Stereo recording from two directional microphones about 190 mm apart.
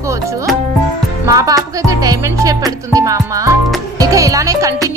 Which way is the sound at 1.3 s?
20° right (ahead or behind).